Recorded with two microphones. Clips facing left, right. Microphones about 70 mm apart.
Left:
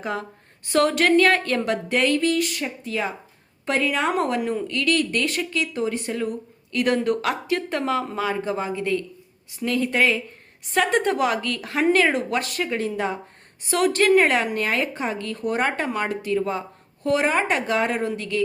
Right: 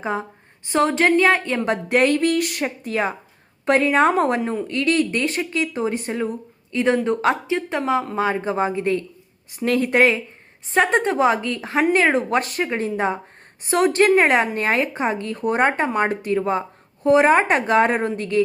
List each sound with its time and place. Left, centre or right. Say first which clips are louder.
0.0 s speech: right 3 dB; right
1.6 s speech: right 4 dB; right
7.5 s speech: right 2 dB; centre
8.1 s speech: right 3 dB; right
12.1 s speech: right 4 dB; right
16.0 s speech: right 3 dB; right